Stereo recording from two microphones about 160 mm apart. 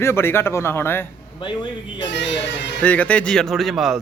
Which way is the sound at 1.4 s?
30° left (ahead or behind).